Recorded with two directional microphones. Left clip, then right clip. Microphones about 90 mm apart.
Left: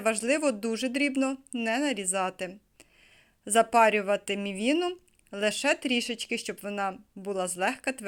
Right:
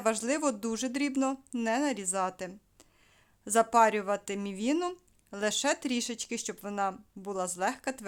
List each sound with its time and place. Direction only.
0.0 s speech: 20° right (ahead or behind)